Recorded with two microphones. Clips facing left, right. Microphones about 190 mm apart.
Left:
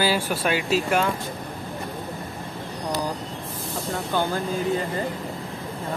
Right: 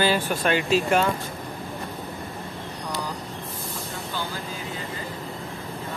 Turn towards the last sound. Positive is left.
turn(degrees=55)  # may be behind; listen again after turning